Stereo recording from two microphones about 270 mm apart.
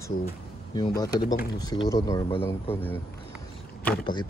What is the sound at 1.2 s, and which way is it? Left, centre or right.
Speech, left.